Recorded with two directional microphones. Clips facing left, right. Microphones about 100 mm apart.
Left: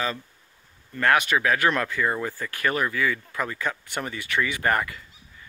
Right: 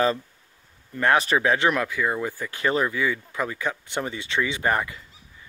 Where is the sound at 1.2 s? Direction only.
30° right (ahead or behind).